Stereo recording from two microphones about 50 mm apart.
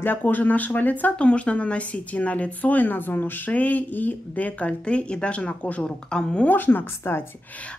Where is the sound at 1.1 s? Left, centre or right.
Left.